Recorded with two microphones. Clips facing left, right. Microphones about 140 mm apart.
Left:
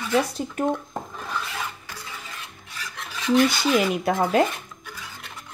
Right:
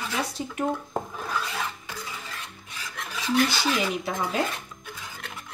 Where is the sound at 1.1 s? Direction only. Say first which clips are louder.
Right 1 dB; 5° right (ahead or behind).